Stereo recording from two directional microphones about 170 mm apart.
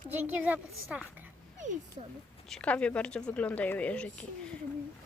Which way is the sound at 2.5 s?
5° left (ahead or behind).